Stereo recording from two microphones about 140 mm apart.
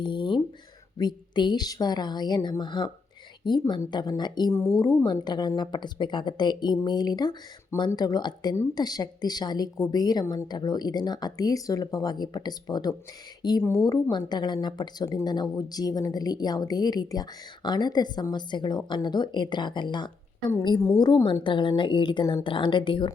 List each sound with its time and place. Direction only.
0.0 s a woman's voice: 35° left (ahead or behind); by 13.8 s 15° left (ahead or behind)
13.9 s a woman's voice: 30° left (ahead or behind)
21.2 s a woman's voice: 35° left (ahead or behind)